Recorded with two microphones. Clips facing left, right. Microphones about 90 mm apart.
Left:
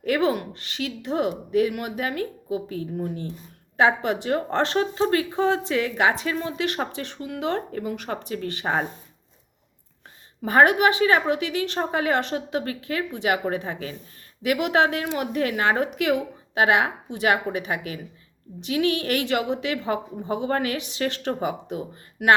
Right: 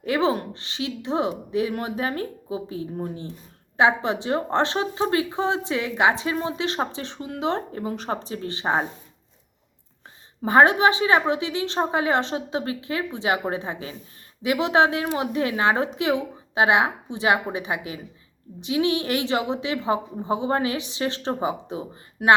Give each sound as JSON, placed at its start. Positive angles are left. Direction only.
{"t": 0.0, "sound": "speech", "side_deg": -25}
{"t": 10.4, "sound": "speech", "side_deg": -25}